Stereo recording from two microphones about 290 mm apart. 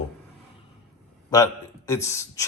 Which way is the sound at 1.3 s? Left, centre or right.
Centre.